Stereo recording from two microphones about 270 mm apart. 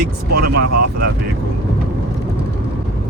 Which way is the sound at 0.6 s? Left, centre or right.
Right.